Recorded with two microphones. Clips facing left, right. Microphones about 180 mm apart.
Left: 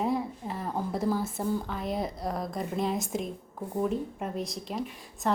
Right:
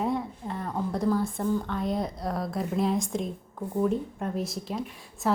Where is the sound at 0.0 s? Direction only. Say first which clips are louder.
Even; centre (ahead or behind).